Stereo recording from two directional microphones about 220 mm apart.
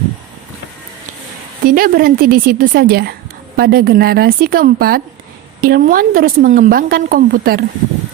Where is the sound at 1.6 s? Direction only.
40° right (ahead or behind).